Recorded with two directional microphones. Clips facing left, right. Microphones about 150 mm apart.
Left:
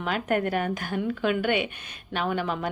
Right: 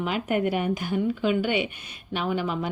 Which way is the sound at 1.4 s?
55° left (ahead or behind).